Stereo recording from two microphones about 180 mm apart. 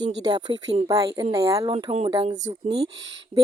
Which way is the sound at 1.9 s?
35° right (ahead or behind).